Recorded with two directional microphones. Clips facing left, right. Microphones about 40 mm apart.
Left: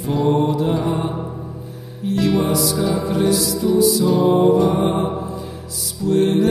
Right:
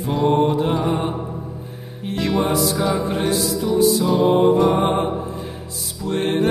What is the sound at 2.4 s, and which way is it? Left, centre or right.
Music, right.